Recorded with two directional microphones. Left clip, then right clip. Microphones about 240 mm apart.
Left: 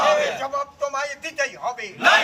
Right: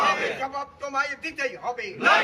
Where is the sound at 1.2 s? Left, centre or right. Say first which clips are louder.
Left 3 dB; centre.